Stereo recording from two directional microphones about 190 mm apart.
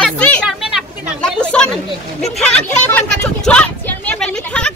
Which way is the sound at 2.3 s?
5° left (ahead or behind).